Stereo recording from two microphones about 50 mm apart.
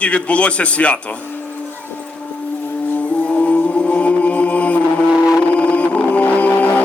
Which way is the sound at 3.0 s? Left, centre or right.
Left.